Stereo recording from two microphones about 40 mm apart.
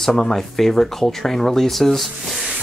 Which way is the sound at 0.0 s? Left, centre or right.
Centre.